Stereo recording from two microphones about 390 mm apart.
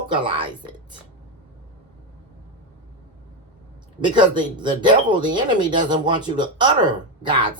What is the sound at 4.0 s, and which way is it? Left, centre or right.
Speech, centre.